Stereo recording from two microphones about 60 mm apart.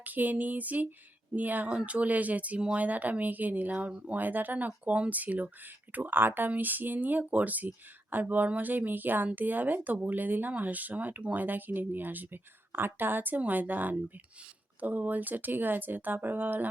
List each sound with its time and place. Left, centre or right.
0.0 s speech: right